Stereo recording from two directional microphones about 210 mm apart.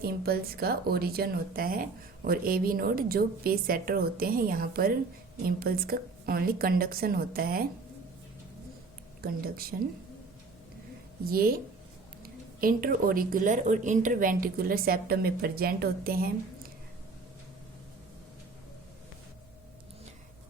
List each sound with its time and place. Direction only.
0.0 s speech: 45° right (ahead or behind)
9.2 s speech: 45° right (ahead or behind)
11.3 s speech: 45° right (ahead or behind)